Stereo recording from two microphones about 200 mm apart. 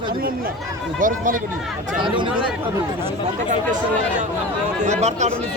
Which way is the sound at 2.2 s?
25° right (ahead or behind).